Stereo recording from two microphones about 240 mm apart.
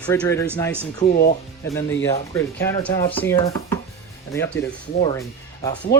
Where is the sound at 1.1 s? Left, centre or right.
Left.